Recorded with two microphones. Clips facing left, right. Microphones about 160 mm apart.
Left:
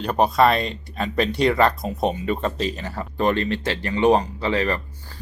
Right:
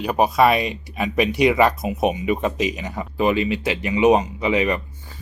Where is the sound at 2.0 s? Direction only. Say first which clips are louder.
Right 3 dB; 10° right (ahead or behind).